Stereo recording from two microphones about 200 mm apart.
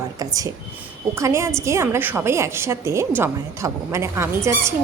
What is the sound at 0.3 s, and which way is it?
A woman's voice, 15° right (ahead or behind).